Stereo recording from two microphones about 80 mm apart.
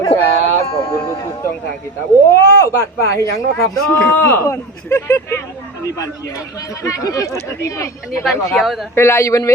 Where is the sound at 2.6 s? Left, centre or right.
Left.